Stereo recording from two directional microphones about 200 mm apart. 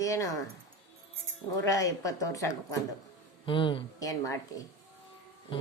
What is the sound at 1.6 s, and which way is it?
Speech, 15° left (ahead or behind).